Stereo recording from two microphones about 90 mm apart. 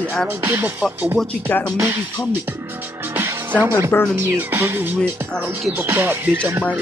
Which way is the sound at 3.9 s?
25° left (ahead or behind).